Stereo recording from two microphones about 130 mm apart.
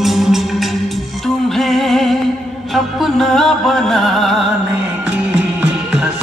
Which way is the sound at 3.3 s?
5° left (ahead or behind).